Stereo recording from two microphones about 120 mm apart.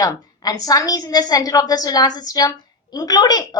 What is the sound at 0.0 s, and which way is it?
A woman's voice, 30° left (ahead or behind).